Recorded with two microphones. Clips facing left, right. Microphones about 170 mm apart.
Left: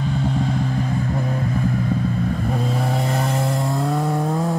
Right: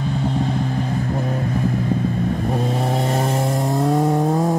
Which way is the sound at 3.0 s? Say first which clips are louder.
Right 2 dB; 25° right (ahead or behind).